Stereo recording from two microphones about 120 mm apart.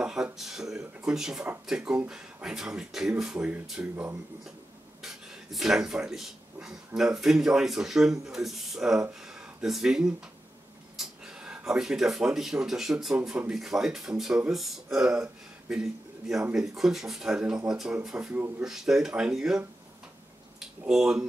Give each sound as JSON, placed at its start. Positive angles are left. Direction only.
{"t": 0.0, "sound": "speech", "side_deg": -5}
{"t": 3.9, "sound": "speech", "side_deg": -20}
{"t": 5.0, "sound": "a man's voice", "side_deg": -5}
{"t": 20.8, "sound": "speech", "side_deg": -5}